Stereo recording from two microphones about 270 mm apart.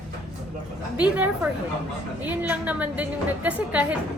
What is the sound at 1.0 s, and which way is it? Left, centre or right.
A woman's voice, centre.